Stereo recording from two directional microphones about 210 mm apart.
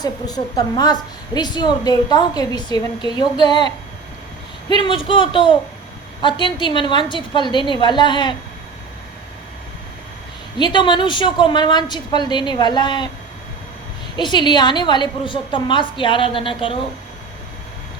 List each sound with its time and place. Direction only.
0.0 s a woman's voice: 20° left (ahead or behind)
4.8 s a woman's voice: 25° left (ahead or behind)
10.6 s a woman's voice: 20° left (ahead or behind)
14.2 s a woman's voice: 20° left (ahead or behind)